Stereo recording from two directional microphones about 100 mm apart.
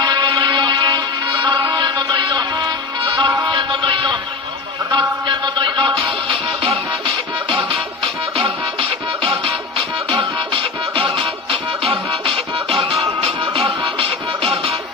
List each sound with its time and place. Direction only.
0.0 s music: 45° right (ahead or behind); by 7.1 s 60° right (ahead or behind)
8.4 s music: 60° right (ahead or behind)